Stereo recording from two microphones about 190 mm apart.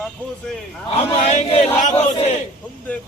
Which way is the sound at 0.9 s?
30° left (ahead or behind).